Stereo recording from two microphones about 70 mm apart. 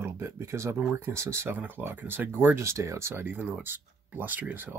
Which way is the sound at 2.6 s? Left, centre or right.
Right.